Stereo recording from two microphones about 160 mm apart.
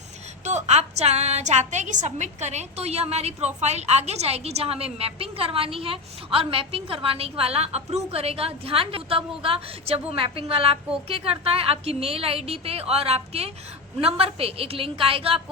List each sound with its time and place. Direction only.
0.4 s a woman's voice: 45° right (ahead or behind)